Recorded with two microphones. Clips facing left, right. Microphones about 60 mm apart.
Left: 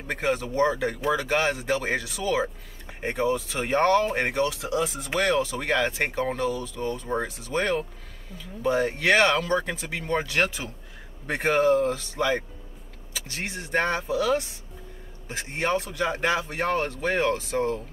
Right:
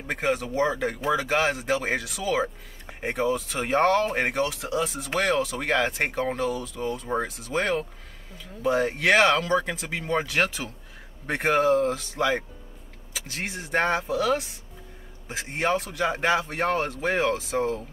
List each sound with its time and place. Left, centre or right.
0.0 s speech: centre